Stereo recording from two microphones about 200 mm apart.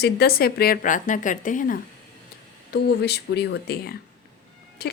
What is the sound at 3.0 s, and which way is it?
Speech, 55° left (ahead or behind).